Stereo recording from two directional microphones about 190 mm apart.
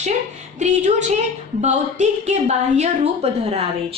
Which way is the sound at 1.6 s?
35° right (ahead or behind).